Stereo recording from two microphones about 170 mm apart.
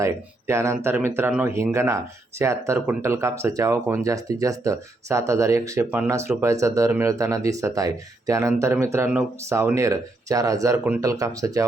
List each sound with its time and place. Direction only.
0.0 s speech: 15° right (ahead or behind)